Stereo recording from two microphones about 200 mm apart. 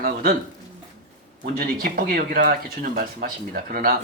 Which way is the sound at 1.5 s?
45° right (ahead or behind).